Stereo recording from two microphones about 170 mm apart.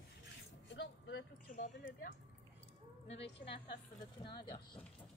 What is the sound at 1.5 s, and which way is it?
Speech, 50° left (ahead or behind).